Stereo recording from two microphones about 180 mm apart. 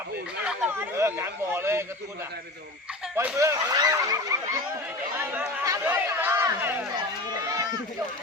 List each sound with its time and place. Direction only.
0.4 s speech: 10° right (ahead or behind)
3.2 s speech: 15° right (ahead or behind)
5.1 s chatter: 10° right (ahead or behind)
6.9 s run: 20° right (ahead or behind)